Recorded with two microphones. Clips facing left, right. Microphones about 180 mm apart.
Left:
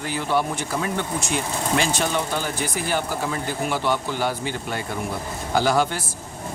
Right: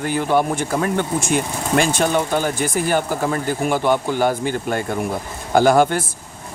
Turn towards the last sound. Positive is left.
turn(degrees=-55)  # may be behind; listen again after turning